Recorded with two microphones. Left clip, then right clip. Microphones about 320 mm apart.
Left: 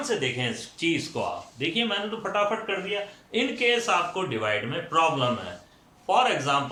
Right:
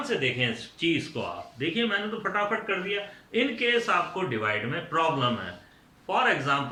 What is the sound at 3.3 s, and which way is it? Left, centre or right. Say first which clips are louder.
Speech: left 1 dB; centre.